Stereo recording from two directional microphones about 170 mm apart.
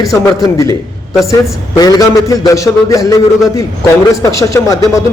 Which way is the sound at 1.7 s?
20° left (ahead or behind).